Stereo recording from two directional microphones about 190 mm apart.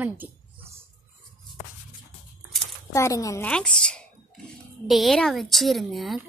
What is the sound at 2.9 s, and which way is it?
Speech, 15° left (ahead or behind).